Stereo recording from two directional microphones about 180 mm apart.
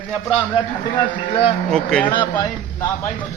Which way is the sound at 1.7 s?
5° left (ahead or behind).